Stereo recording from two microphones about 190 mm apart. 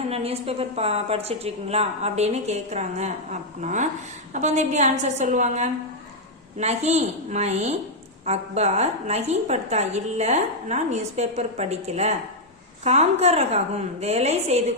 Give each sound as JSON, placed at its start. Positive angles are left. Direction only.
{"t": 0.1, "sound": "a woman's voice", "side_deg": -30}